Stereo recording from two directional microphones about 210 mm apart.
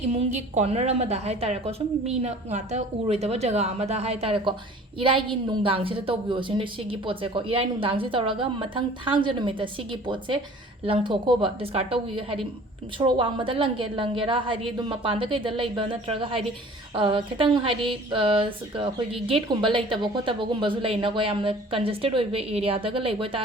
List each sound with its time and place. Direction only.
0.1 s a woman's voice: 30° right (ahead or behind)